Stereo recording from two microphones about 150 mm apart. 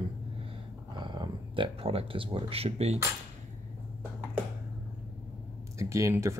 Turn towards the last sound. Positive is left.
turn(degrees=-20)  # may be behind; listen again after turning